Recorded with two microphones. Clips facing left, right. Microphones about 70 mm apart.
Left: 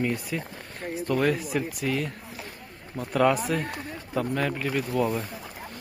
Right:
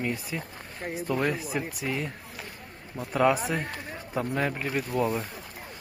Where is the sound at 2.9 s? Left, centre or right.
Centre.